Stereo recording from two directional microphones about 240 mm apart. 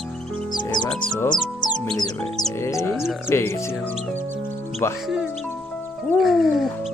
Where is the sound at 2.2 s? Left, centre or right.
Centre.